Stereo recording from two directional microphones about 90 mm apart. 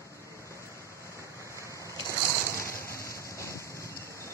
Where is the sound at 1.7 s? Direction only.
35° left (ahead or behind).